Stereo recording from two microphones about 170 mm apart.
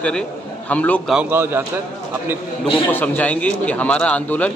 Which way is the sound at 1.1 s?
10° right (ahead or behind).